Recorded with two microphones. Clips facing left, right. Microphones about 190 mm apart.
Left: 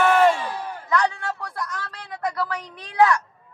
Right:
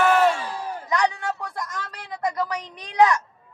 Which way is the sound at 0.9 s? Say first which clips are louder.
Even; 15° right (ahead or behind).